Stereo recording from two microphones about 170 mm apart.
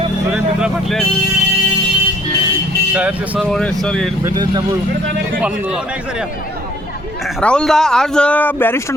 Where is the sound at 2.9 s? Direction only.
5° right (ahead or behind).